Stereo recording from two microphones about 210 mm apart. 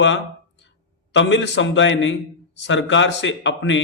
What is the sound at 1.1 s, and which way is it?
A man's voice, 60° left (ahead or behind).